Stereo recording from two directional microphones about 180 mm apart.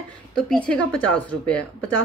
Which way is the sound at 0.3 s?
5° left (ahead or behind).